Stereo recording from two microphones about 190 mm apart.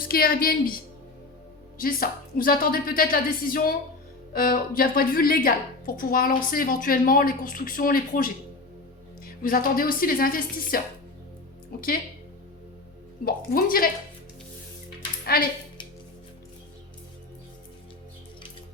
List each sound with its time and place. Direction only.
0.0 s a woman's voice: 50° left (ahead or behind)
1.8 s a woman's voice: 50° left (ahead or behind)
9.4 s a woman's voice: 50° left (ahead or behind)
13.2 s a woman's voice: 50° left (ahead or behind)
15.2 s speech: 50° left (ahead or behind)